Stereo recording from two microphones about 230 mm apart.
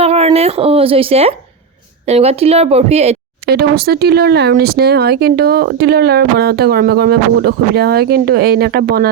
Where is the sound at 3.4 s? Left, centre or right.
Right.